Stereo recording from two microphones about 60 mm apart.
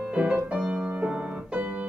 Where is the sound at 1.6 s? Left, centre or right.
Right.